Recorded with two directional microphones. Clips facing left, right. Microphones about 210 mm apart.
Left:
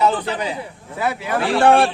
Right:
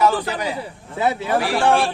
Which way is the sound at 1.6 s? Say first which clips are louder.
Left 6 dB; 60° left (ahead or behind).